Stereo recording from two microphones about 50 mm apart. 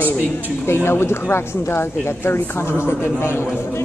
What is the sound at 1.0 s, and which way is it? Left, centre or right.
Speech, left.